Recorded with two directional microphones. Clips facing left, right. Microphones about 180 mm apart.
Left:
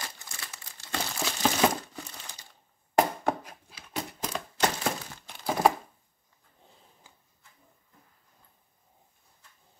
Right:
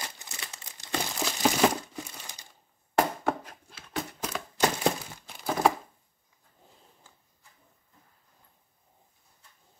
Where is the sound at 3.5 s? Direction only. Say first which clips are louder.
Even; 10° left (ahead or behind).